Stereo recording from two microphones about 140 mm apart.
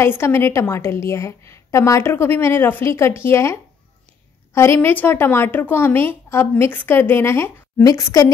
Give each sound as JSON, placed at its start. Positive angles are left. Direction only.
{"t": 0.0, "sound": "a woman's voice", "side_deg": 15}
{"t": 4.6, "sound": "a woman's voice", "side_deg": 20}